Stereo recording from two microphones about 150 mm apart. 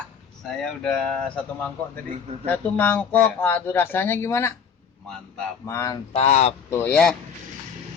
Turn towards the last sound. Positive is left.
turn(degrees=5)  # may be behind; listen again after turning